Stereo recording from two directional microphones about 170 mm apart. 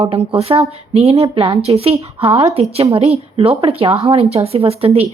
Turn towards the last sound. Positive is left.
turn(degrees=-35)  # may be behind; listen again after turning